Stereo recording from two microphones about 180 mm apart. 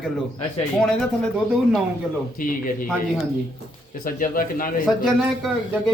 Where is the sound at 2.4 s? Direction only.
50° left (ahead or behind).